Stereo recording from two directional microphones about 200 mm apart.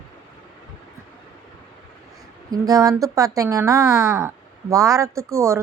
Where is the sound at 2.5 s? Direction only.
20° right (ahead or behind).